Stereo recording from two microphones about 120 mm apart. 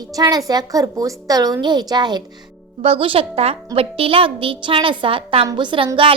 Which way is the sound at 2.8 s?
50° right (ahead or behind).